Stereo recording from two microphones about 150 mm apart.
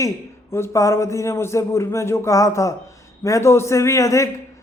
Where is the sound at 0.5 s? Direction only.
20° left (ahead or behind).